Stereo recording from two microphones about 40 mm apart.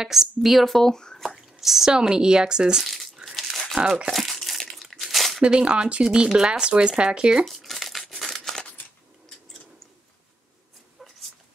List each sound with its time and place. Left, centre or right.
0.0 s speech: centre
1.4 s drip: centre
1.9 s speech: centre
2.8 s a sound: centre
3.3 s crumpling: centre
5.4 s speech: right
7.4 s crumpling: centre
8.2 s a sound: centre